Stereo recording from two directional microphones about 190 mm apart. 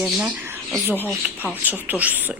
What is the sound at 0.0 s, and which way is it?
Speech, 5° right (ahead or behind).